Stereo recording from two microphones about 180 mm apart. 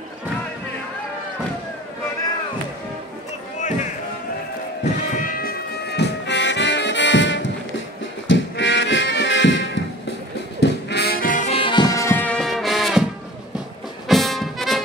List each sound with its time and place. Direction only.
5.1 s music: 50° left (ahead or behind); by 9.8 s 90° left
10.6 s music: 70° left (ahead or behind); by 11.5 s 45° left (ahead or behind)
11.5 s music: 25° left (ahead or behind); by 13.0 s centre (ahead or behind)
14.0 s music: centre (ahead or behind)